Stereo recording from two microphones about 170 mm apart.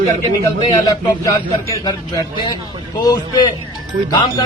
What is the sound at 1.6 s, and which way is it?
Speech, 20° left (ahead or behind).